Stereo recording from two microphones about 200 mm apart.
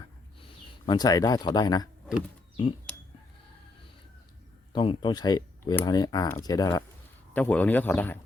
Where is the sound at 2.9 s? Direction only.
5° left (ahead or behind).